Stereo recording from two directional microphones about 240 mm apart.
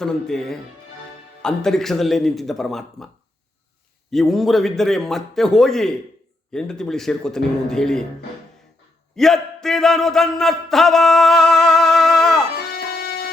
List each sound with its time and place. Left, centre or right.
0.0 s a man's voice: centre
4.1 s a man's voice: centre
9.1 s speech: centre
12.5 s music: left